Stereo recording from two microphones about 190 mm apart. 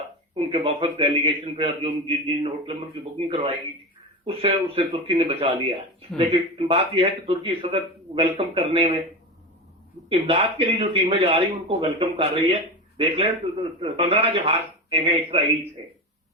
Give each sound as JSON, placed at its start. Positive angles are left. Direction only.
{"t": 0.3, "sound": "speech", "side_deg": -30}
{"t": 10.1, "sound": "speech", "side_deg": -30}